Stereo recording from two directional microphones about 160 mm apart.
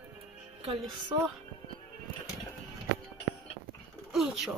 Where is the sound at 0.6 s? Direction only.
35° right (ahead or behind).